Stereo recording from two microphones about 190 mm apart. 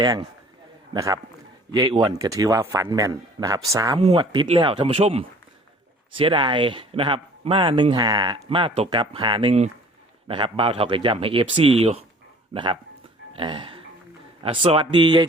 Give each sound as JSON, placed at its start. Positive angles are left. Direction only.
{"t": 0.0, "sound": "a man's voice", "side_deg": -20}
{"t": 4.0, "sound": "speech", "side_deg": -30}